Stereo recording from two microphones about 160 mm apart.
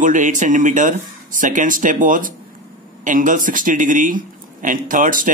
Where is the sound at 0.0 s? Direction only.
55° right (ahead or behind).